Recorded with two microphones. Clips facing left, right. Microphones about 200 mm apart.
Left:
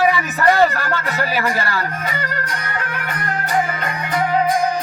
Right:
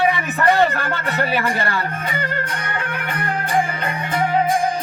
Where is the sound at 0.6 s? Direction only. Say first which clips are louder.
Left 2 dB; 40° left (ahead or behind).